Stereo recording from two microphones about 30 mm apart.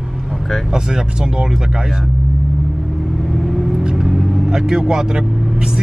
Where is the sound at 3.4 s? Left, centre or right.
Centre.